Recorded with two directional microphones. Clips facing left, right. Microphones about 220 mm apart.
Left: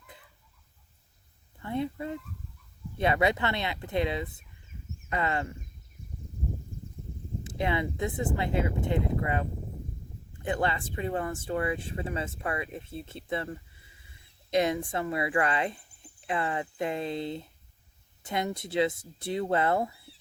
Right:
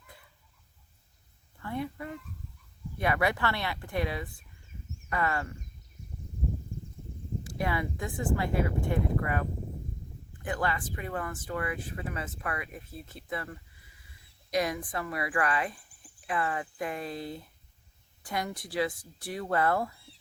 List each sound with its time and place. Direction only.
1.5 s a sound: 20° left (ahead or behind)
3.0 s speech: 25° left (ahead or behind)
7.4 s speech: 25° left (ahead or behind)